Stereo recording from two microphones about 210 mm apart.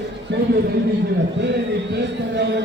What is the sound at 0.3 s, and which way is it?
Speech, 50° right (ahead or behind).